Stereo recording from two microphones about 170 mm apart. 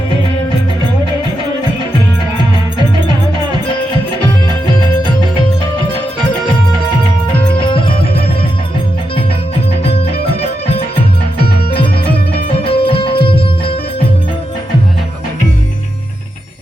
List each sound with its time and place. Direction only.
2.4 s music: 25° right (ahead or behind)
7.6 s music: 30° left (ahead or behind)
10.7 s music: 35° left (ahead or behind)
12.5 s music: 35° left (ahead or behind)